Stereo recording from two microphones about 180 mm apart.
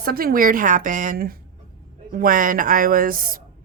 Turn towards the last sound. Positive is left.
turn(degrees=-50)  # may be behind; listen again after turning